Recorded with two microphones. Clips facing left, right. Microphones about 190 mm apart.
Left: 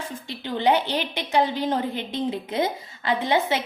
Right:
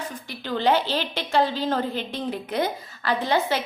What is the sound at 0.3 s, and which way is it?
A woman's voice, 20° left (ahead or behind).